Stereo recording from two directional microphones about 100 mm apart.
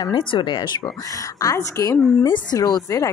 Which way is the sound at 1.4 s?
35° left (ahead or behind).